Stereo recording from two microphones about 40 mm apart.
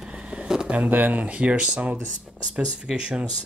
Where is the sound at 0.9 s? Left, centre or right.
Right.